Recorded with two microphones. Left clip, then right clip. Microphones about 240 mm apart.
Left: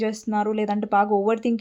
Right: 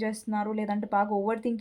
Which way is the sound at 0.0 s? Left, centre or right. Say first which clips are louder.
Left 7 dB; left.